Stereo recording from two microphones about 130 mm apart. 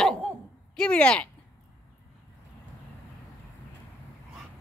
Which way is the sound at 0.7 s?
10° left (ahead or behind).